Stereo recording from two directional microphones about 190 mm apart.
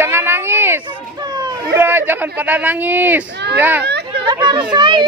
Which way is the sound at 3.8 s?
60° right (ahead or behind).